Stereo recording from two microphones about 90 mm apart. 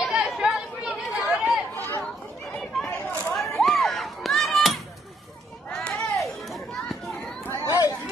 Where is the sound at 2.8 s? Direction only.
5° left (ahead or behind).